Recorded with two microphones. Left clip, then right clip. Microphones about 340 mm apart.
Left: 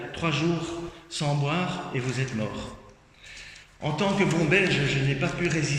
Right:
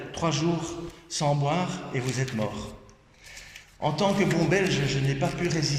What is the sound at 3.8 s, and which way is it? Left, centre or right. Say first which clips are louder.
A man's voice: right 1 dB; centre.